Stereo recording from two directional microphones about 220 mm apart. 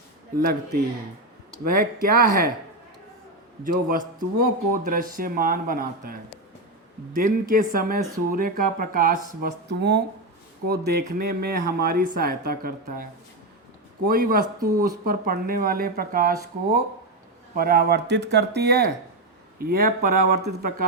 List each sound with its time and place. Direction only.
0.3 s speech: 45° right (ahead or behind)
3.6 s speech: 40° right (ahead or behind)
7.2 s speech: 40° right (ahead or behind)
17.5 s speech: 40° right (ahead or behind)